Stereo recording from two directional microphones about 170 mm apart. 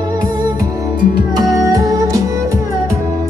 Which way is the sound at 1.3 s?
20° right (ahead or behind).